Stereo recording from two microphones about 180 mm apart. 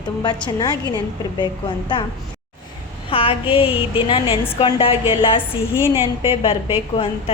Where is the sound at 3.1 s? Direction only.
30° left (ahead or behind).